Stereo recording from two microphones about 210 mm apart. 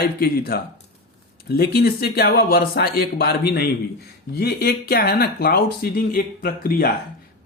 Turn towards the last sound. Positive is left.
turn(degrees=45)  # may be behind; listen again after turning